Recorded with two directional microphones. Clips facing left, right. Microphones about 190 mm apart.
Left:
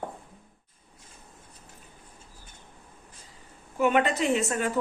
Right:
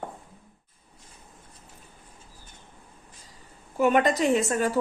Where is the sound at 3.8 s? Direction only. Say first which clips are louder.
Right 2 dB; 40° right (ahead or behind).